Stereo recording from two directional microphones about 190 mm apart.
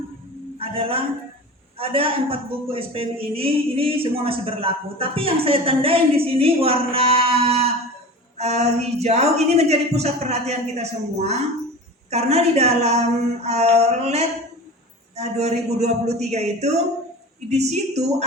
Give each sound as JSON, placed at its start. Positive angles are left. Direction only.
{"t": 0.6, "sound": "a man's voice", "side_deg": -30}